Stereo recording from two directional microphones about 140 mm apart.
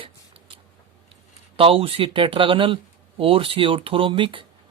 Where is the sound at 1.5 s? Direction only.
40° right (ahead or behind).